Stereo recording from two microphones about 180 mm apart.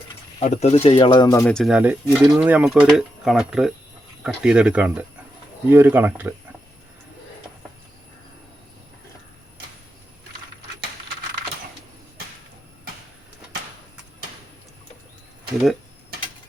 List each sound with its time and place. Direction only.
0.3 s speech: 35° left (ahead or behind); by 1.5 s 20° left (ahead or behind)
1.5 s speech: centre (ahead or behind)